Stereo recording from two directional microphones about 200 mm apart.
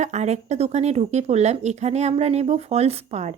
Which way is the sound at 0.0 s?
35° right (ahead or behind).